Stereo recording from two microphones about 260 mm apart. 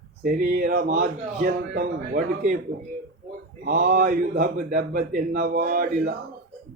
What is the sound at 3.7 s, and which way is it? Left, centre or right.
Speech, right.